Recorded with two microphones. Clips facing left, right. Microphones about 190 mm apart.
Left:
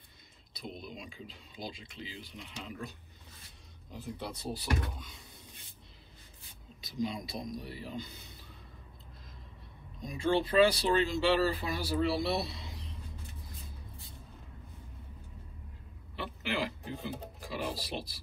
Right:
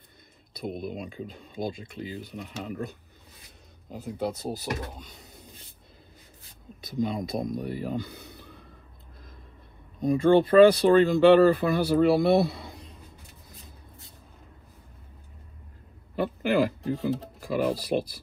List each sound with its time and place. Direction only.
0.6 s speech: 55° right (ahead or behind)
6.8 s speech: 55° right (ahead or behind)
9.9 s speech: 55° right (ahead or behind)
16.2 s speech: 50° right (ahead or behind)